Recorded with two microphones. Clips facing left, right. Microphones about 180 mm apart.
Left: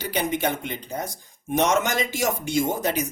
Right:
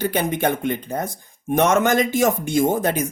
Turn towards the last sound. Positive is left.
turn(degrees=-50)  # may be behind; listen again after turning